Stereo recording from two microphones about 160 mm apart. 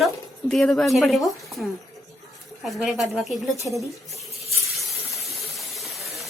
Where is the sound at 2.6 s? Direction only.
Centre (ahead or behind).